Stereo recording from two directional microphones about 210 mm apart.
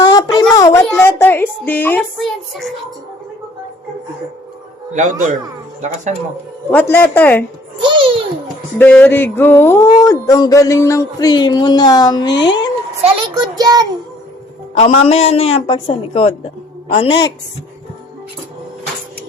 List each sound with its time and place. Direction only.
0.0 s a sound: 20° left (ahead or behind)
0.9 s speech: 10° left (ahead or behind)
4.9 s a man's voice: 35° right (ahead or behind)
6.7 s speech: 10° left (ahead or behind)
7.8 s babbling: 25° right (ahead or behind)
8.8 s speech: 10° left (ahead or behind)
13.0 s a child's voice: 25° right (ahead or behind)
14.8 s a woman's voice: 30° left (ahead or behind)